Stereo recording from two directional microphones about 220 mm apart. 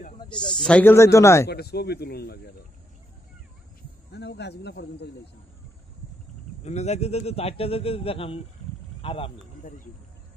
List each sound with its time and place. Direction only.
0.6 s speech: 5° left (ahead or behind)
1.5 s speech: 45° left (ahead or behind)
4.1 s speech: 50° left (ahead or behind)
6.6 s a man's voice: 30° left (ahead or behind)